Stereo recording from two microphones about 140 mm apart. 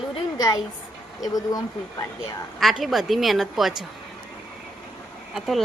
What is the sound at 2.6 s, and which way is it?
Speech, centre (ahead or behind).